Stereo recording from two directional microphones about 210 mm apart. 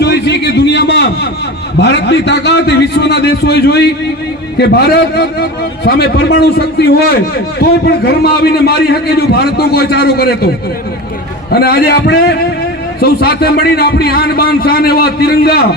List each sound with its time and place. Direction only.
0.0 s a sound: 55° left (ahead or behind)
1.8 s a man's voice: 55° left (ahead or behind)
11.5 s a man's voice: 50° left (ahead or behind)